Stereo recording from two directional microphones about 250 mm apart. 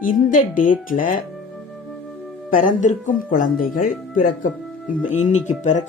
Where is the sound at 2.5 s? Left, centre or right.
Left.